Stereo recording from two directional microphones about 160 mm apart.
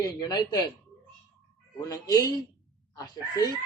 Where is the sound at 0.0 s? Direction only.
25° left (ahead or behind).